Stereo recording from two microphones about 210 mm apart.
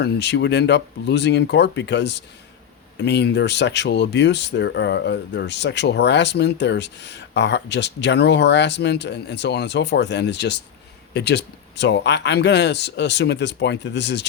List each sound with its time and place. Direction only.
0.0 s speech: 55° left (ahead or behind)